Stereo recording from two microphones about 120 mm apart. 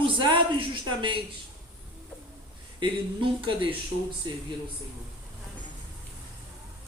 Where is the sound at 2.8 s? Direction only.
45° right (ahead or behind).